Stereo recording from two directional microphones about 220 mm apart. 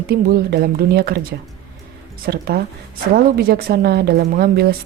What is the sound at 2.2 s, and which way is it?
Speech, 45° right (ahead or behind).